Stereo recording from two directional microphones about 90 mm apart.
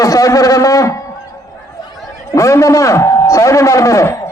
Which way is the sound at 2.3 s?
35° left (ahead or behind).